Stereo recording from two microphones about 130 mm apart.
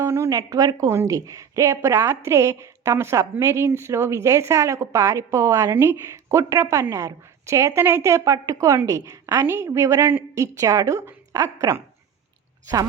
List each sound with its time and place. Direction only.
0.0 s a woman's voice: 20° right (ahead or behind)